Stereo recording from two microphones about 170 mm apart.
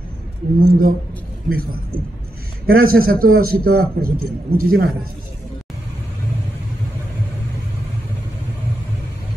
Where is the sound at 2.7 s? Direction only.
60° right (ahead or behind).